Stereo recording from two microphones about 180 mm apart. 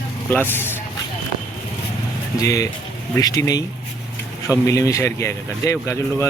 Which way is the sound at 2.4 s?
20° left (ahead or behind).